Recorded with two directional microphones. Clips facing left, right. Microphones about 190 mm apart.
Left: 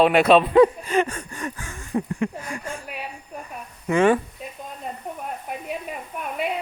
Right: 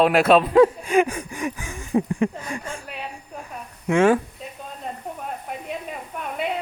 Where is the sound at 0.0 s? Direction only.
Centre (ahead or behind).